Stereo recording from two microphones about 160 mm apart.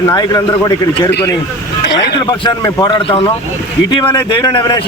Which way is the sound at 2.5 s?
25° left (ahead or behind).